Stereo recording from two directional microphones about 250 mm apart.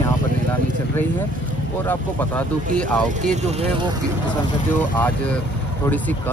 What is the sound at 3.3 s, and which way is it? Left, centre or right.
Speech, right.